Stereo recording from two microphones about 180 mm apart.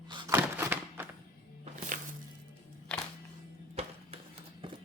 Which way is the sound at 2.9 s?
5° left (ahead or behind).